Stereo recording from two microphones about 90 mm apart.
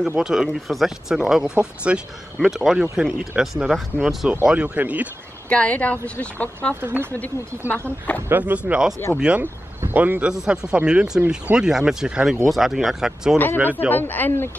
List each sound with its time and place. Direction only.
0.2 s speech: 5° right (ahead or behind)
4.5 s speech: 15° right (ahead or behind)
5.5 s speech: 15° left (ahead or behind)
6.7 s speech: 25° right (ahead or behind)
7.1 s speech: 20° left (ahead or behind)
8.3 s speech: 20° right (ahead or behind)
10.3 s speech: 5° right (ahead or behind)
13.8 s speech: 20° left (ahead or behind)